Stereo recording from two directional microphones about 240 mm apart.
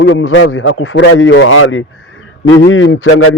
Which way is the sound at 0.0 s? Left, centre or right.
Left.